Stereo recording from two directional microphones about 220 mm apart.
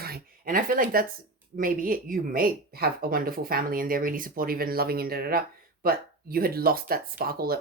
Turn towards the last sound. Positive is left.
turn(degrees=-45)  # may be behind; listen again after turning